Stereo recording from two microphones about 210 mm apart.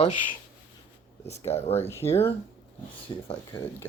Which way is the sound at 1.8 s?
10° left (ahead or behind).